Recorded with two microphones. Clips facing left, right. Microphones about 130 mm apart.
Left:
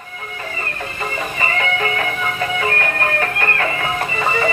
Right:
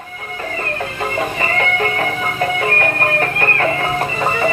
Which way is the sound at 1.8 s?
40° right (ahead or behind).